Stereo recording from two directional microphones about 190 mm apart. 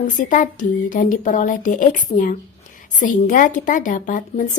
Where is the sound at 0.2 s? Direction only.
45° left (ahead or behind).